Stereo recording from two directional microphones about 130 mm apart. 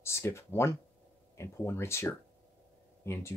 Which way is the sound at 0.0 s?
20° left (ahead or behind).